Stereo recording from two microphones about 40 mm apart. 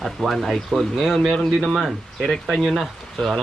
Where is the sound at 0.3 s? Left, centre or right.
Centre.